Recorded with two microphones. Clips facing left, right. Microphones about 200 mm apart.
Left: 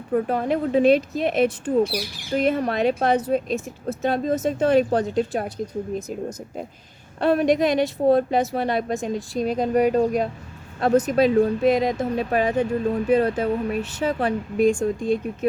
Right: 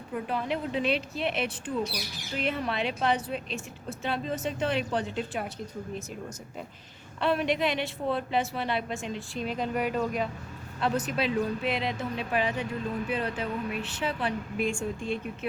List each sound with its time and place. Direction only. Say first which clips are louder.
0.1 s speech: left 9 dB; 45° left (ahead or behind)
7.2 s speech: left 8 dB; 45° left (ahead or behind)